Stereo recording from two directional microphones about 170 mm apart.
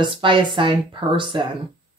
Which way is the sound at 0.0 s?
30° right (ahead or behind).